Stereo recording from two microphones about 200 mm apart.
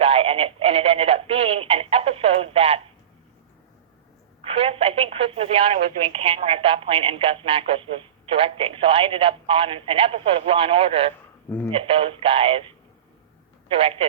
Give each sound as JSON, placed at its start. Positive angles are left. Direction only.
{"t": 0.0, "sound": "speech", "side_deg": -30}
{"t": 4.4, "sound": "speech", "side_deg": -30}